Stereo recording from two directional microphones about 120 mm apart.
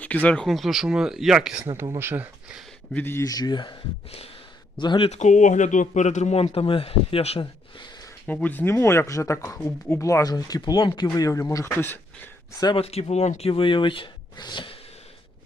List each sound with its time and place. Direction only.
0.0 s speech: 10° left (ahead or behind); by 1.6 s 5° right (ahead or behind)
1.7 s speech: 20° right (ahead or behind)
2.9 s speech: 20° left (ahead or behind)
3.2 s speech: 30° left (ahead or behind)
4.8 s speech: 45° left (ahead or behind)
5.1 s speech: 85° left; by 7.4 s 55° left (ahead or behind)
8.3 s speech: 15° left (ahead or behind)
12.7 s speech: 60° left (ahead or behind)
13.5 s speech: 45° left (ahead or behind)